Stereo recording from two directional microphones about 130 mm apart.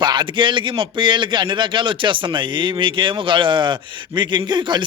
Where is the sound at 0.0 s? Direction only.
35° right (ahead or behind).